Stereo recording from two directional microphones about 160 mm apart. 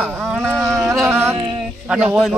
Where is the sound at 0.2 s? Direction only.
Centre (ahead or behind).